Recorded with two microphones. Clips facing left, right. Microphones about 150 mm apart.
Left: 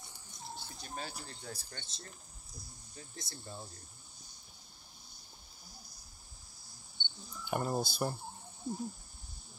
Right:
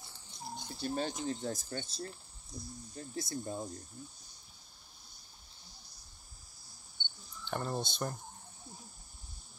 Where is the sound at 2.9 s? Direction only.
50° right (ahead or behind).